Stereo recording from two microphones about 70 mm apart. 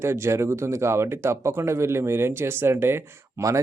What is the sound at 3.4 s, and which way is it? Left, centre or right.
Speech, right.